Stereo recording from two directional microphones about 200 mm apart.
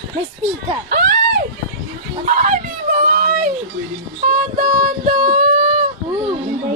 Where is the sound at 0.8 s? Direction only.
50° right (ahead or behind).